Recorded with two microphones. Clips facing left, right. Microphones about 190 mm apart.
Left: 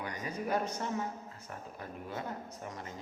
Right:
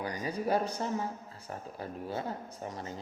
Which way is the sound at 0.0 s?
30° right (ahead or behind).